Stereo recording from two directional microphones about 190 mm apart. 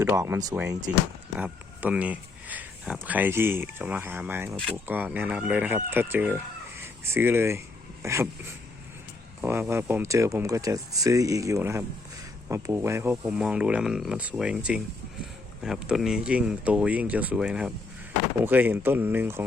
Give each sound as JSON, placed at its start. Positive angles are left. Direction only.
{"t": 0.0, "sound": "speech", "side_deg": -15}